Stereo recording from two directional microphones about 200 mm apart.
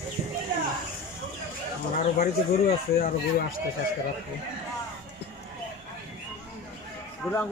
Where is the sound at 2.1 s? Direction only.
45° left (ahead or behind).